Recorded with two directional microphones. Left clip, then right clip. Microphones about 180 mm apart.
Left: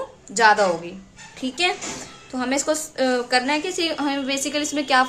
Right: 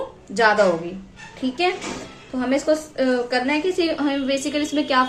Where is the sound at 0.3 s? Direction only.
20° left (ahead or behind).